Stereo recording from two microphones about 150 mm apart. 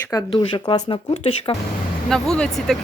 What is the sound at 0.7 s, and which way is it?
Speech, 35° left (ahead or behind).